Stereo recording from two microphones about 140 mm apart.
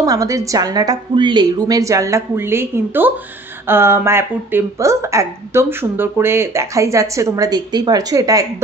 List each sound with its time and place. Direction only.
0.0 s speech: 25° right (ahead or behind)